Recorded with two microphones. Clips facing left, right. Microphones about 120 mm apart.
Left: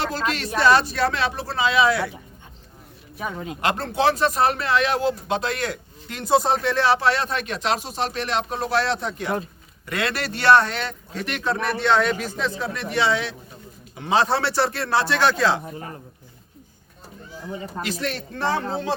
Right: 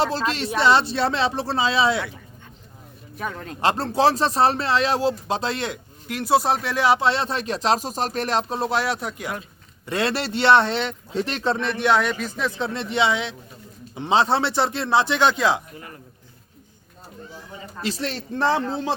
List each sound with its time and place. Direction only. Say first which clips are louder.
0.0 s a man's voice: right 2 dB; 30° right (ahead or behind)
3.2 s a man's voice: left 1 dB; 5° left (ahead or behind)
3.6 s speech: right 2 dB; 30° right (ahead or behind)
6.1 s speech: even; 5° right (ahead or behind)
6.8 s speech: right 3 dB; 20° right (ahead or behind)
8.8 s speech: left 1 dB; 5° right (ahead or behind)
9.8 s a man's voice: right 2 dB; 30° right (ahead or behind)
11.8 s speech: left 1 dB; 5° right (ahead or behind)
12.5 s a man's voice: right 3 dB; 25° right (ahead or behind)
15.7 s a man's voice: left 5 dB; 30° left (ahead or behind)
17.8 s a man's voice: right 3 dB; 30° right (ahead or behind)